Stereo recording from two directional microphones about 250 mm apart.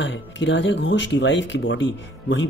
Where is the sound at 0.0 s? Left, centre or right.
Left.